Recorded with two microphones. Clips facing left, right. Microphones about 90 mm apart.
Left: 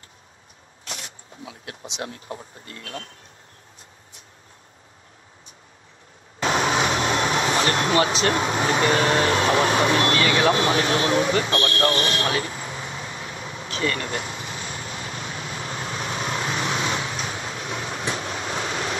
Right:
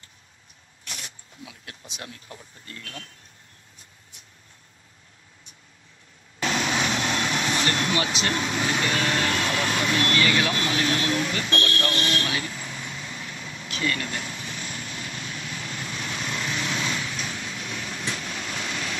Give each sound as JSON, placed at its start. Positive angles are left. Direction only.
{"t": 0.8, "sound": "speech", "side_deg": 35}
{"t": 6.4, "sound": "vehicle", "side_deg": 35}
{"t": 9.8, "sound": "speech", "side_deg": 35}
{"t": 15.2, "sound": "vehicle", "side_deg": 35}